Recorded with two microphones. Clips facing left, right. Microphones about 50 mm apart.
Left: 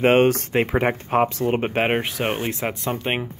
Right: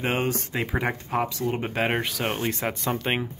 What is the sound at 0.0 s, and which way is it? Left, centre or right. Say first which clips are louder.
Speech: left 10 dB; left.